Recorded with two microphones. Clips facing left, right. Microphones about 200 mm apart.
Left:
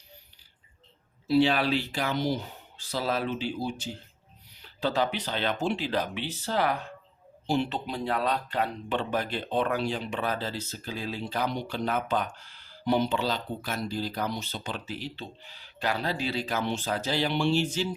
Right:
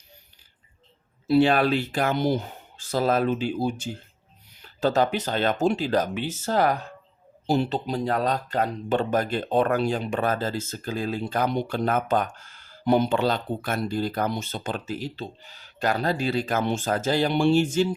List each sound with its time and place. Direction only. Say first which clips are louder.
1.3 s speech: right 4 dB; 50° right (ahead or behind)